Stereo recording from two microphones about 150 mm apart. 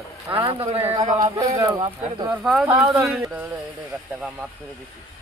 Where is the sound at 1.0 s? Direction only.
30° right (ahead or behind).